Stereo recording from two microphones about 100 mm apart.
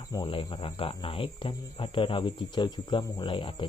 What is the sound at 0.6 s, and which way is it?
Speech, 65° left (ahead or behind).